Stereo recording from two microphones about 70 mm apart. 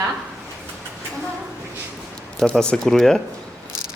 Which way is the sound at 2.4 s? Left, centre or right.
Centre.